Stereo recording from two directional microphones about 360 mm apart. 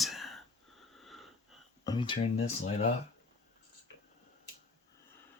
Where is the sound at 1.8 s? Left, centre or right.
Centre.